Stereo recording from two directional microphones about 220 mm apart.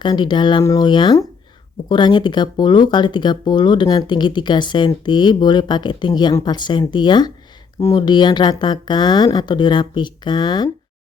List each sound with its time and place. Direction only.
0.0 s speech: 20° left (ahead or behind)